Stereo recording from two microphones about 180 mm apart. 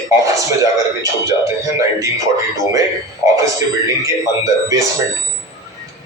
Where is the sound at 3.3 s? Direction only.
15° right (ahead or behind).